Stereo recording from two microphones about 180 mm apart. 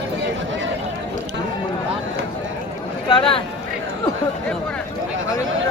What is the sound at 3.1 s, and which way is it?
Speech, 30° left (ahead or behind).